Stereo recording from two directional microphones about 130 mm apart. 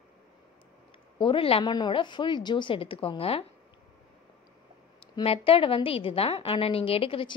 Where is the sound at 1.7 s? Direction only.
35° left (ahead or behind).